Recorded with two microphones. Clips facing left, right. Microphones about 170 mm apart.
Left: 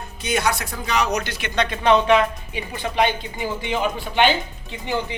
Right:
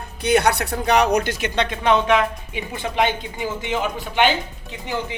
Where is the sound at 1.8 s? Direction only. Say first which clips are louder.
Left 2 dB; 5° right (ahead or behind).